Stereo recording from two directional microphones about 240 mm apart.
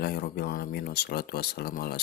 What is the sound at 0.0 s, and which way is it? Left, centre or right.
Speech, left.